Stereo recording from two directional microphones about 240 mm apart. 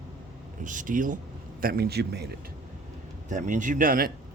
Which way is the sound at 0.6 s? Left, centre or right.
Right.